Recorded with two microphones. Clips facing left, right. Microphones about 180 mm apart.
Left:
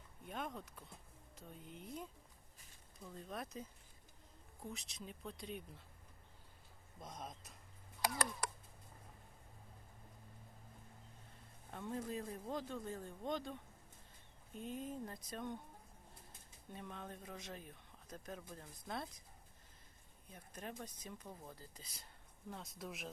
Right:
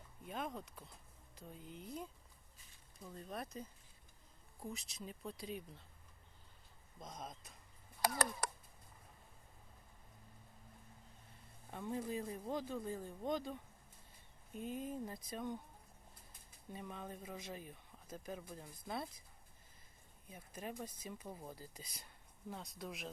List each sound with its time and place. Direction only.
0.3 s speech: centre (ahead or behind)
7.0 s speech: centre (ahead or behind)
8.0 s speech: 40° right (ahead or behind)
11.7 s speech: centre (ahead or behind)
16.7 s speech: 5° right (ahead or behind)
20.3 s speech: 5° right (ahead or behind)
22.4 s speech: centre (ahead or behind)